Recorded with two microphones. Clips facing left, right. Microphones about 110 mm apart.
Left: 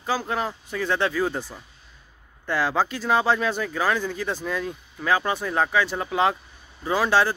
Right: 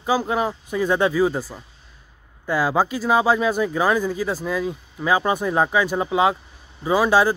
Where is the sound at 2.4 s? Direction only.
10° right (ahead or behind).